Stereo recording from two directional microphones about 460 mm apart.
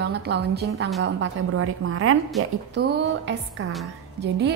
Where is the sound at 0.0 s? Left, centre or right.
Right.